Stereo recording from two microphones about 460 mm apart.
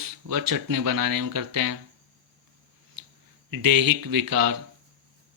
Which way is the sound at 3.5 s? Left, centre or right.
Right.